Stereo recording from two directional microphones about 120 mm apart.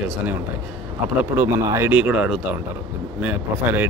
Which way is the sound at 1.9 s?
10° right (ahead or behind).